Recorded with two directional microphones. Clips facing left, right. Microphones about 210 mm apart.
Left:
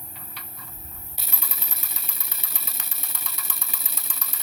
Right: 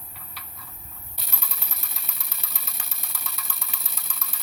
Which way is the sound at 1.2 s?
Centre (ahead or behind).